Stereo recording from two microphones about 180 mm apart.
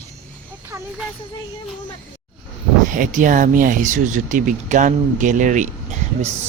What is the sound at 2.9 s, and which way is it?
A man's voice, 45° right (ahead or behind).